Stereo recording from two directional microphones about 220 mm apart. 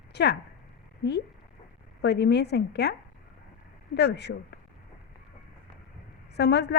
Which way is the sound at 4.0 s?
50° left (ahead or behind).